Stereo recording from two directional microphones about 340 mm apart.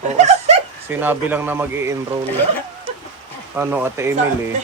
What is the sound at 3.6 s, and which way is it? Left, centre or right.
Speech, centre.